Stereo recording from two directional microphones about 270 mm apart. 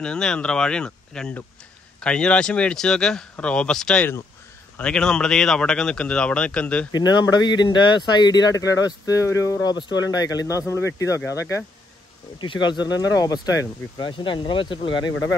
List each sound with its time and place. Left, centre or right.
0.0 s speech: centre
6.9 s speech: centre